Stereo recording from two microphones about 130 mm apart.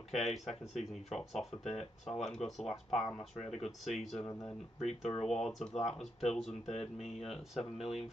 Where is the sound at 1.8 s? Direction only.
55° left (ahead or behind).